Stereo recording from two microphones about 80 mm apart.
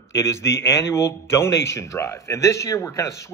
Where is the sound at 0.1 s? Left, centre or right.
Left.